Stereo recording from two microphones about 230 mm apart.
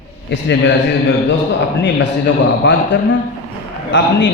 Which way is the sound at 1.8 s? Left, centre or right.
Left.